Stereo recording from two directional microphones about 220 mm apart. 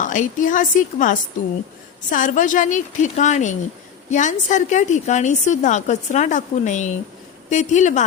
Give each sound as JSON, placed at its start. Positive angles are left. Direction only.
{"t": 0.0, "sound": "a woman's voice", "side_deg": 35}